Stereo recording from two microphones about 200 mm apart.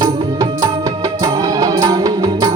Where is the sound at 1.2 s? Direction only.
15° right (ahead or behind).